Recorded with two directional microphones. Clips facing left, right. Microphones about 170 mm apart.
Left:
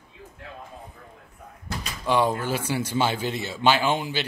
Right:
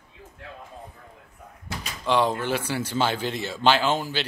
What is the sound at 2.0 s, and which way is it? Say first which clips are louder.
Speech: even; 10° left (ahead or behind).